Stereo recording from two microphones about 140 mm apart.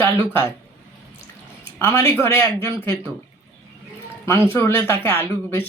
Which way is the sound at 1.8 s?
20° left (ahead or behind).